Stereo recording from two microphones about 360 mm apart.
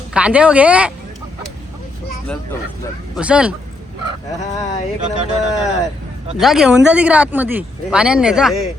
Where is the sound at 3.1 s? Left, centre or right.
Centre.